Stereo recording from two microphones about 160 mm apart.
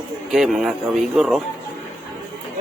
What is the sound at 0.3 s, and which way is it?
Speech, centre (ahead or behind).